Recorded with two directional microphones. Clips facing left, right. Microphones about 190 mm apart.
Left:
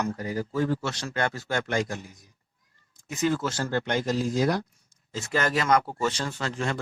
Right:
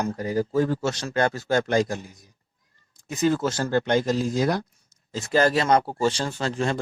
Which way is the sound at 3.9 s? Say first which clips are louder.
Right 1 dB; 25° right (ahead or behind).